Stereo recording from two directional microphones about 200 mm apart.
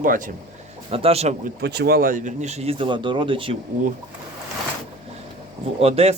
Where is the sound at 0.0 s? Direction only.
45° right (ahead or behind).